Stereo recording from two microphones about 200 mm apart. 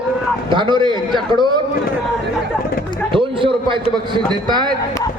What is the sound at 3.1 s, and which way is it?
A man's voice, 25° right (ahead or behind).